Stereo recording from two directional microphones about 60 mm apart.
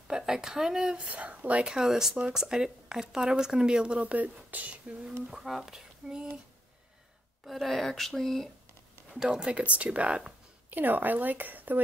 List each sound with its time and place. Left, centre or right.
0.1 s speech: centre
1.7 s speech: centre; by 4.7 s right
5.2 s speech: centre
7.4 s speech: centre
9.1 s speech: centre
10.7 s a woman's voice: right